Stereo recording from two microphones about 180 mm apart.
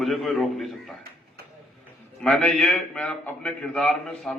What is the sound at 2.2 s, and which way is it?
A man's voice, centre (ahead or behind).